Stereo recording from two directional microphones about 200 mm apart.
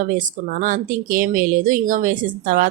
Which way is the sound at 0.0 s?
40° right (ahead or behind).